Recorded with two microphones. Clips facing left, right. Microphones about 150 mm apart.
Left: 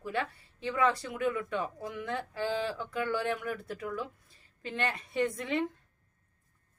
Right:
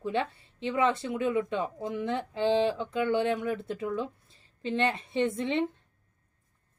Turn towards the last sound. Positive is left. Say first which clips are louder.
# right 3 dB
turn(degrees=-25)  # may be behind; listen again after turning